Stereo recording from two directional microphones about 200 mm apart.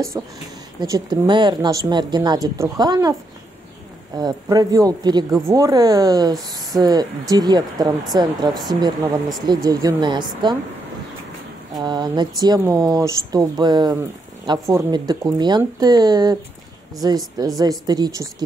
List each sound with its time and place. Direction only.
0.2 s speech: 15° right (ahead or behind)
4.2 s speech: 20° right (ahead or behind)
11.7 s speech: 20° right (ahead or behind)